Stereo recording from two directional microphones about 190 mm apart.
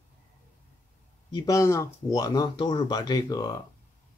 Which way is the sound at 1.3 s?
15° left (ahead or behind).